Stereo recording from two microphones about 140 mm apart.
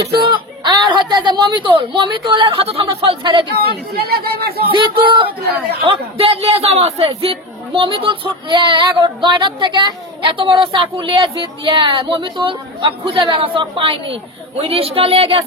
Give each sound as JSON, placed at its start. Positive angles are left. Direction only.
{"t": 0.3, "sound": "speech", "side_deg": -35}
{"t": 3.9, "sound": "speech", "side_deg": -90}
{"t": 4.7, "sound": "a man's voice", "side_deg": -35}